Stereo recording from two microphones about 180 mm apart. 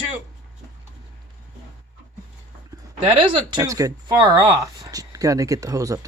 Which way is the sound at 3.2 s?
25° right (ahead or behind).